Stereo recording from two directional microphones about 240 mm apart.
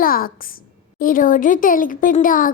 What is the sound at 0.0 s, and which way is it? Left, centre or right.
A child's voice, left.